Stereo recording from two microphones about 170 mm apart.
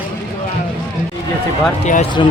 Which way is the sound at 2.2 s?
30° left (ahead or behind).